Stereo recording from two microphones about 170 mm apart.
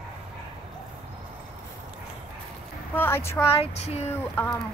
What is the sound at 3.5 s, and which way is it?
Child singing, 35° left (ahead or behind).